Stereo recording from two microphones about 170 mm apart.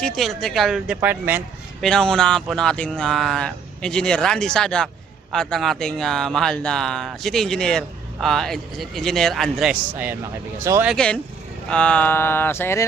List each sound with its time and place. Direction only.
0.0 s speech: 5° left (ahead or behind)
1.8 s speech: 5° left (ahead or behind); by 10.9 s 15° right (ahead or behind)
10.9 s speech: 5° left (ahead or behind)
11.7 s a sound: 5° left (ahead or behind)